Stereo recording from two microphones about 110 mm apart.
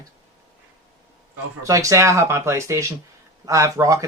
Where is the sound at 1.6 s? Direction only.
30° right (ahead or behind).